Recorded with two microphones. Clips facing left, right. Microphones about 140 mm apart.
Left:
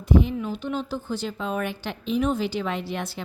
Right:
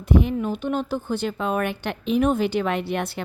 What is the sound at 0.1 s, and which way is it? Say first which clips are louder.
A woman's voice: right 1 dB; 60° right (ahead or behind).